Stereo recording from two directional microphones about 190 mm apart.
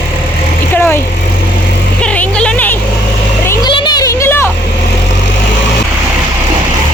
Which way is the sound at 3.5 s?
25° left (ahead or behind).